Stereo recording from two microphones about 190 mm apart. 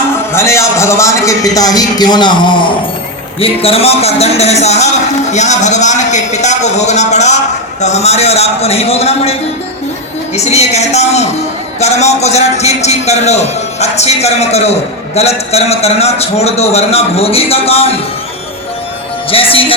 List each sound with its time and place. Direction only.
0.3 s a man's voice: 15° left (ahead or behind); by 9.3 s 30° left (ahead or behind)
10.3 s a man's voice: 35° left (ahead or behind)
19.3 s a man's voice: 30° left (ahead or behind)